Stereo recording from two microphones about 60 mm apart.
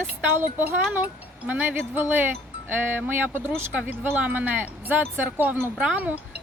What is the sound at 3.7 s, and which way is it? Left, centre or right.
Speech, right.